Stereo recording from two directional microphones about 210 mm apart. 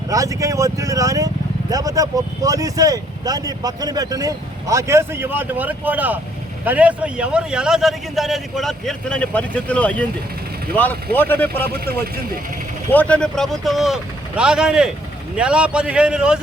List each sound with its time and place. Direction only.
0.1 s a man's voice: 15° right (ahead or behind); by 11.7 s 10° left (ahead or behind)
12.9 s a man's voice: 5° left (ahead or behind)